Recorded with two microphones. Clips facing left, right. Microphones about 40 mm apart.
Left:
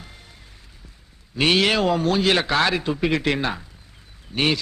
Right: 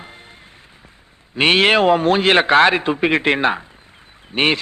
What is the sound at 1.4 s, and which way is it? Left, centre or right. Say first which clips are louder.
A woman's voice: right 5 dB; right.